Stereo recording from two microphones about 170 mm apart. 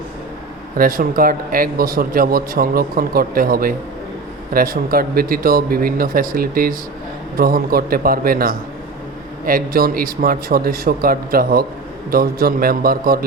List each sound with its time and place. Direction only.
0.8 s a man's voice: 55° right (ahead or behind)